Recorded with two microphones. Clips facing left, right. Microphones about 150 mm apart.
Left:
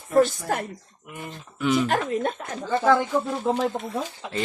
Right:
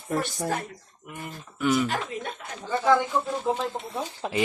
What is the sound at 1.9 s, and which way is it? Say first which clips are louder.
Speech: left 7 dB; 55° left (ahead or behind).